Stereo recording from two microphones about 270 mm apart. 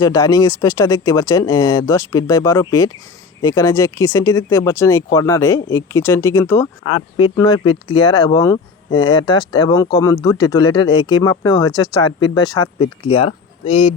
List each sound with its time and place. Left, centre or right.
0.0 s speech: centre